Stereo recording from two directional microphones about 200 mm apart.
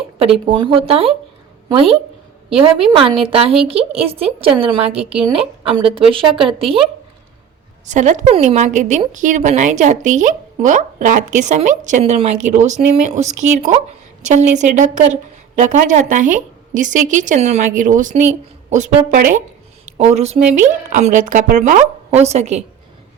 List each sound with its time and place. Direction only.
0.4 s a woman's voice: 25° right (ahead or behind)
7.9 s a woman's voice: 35° right (ahead or behind)